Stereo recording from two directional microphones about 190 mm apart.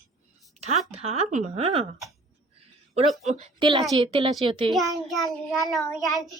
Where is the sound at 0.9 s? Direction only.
35° right (ahead or behind).